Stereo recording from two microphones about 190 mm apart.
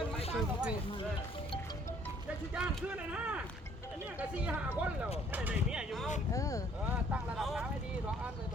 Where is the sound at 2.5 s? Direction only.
5° right (ahead or behind).